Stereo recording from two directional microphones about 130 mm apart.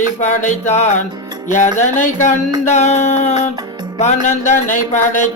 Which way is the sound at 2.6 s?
60° left (ahead or behind).